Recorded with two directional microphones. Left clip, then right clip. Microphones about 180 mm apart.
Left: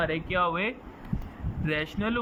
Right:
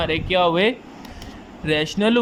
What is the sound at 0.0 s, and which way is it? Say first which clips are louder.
Speech: right 8 dB; 15° right (ahead or behind).